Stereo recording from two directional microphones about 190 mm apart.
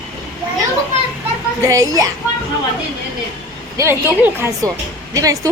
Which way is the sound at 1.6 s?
15° right (ahead or behind).